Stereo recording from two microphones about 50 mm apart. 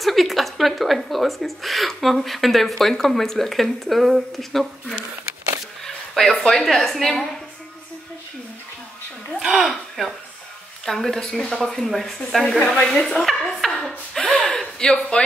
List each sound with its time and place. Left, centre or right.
0.0 s a woman's voice: centre
5.9 s a sound: centre
6.3 s a woman's voice: centre
6.6 s a woman's voice: centre
9.6 s speech: centre
10.9 s a woman's voice: centre
12.4 s a woman's voice: left
13.2 s laughter: centre
14.4 s a sound: centre